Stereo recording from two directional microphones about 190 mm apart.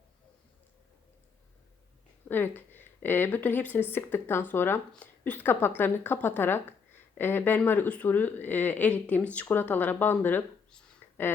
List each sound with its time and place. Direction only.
2.3 s speech: 10° left (ahead or behind)